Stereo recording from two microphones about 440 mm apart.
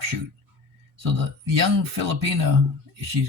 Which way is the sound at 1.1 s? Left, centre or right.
Right.